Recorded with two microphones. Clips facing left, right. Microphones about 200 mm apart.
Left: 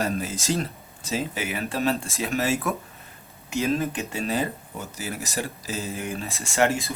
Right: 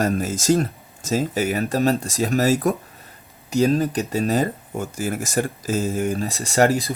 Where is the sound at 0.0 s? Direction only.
45° right (ahead or behind).